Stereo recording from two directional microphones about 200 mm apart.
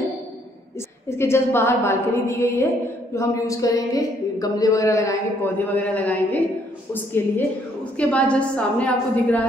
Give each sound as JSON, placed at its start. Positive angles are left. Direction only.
{"t": 1.0, "sound": "speech", "side_deg": 10}